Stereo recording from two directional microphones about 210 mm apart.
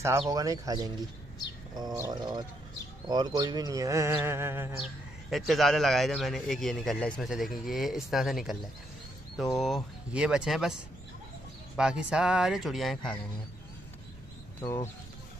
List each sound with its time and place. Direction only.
0.3 s music: 15° right (ahead or behind)
1.8 s speech: 20° right (ahead or behind)
3.1 s music: 20° right (ahead or behind); by 5.4 s centre (ahead or behind)
5.5 s a man's voice: centre (ahead or behind)
14.6 s speech: 15° left (ahead or behind)